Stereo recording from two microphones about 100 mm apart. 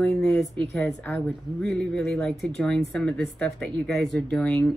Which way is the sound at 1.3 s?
15° left (ahead or behind).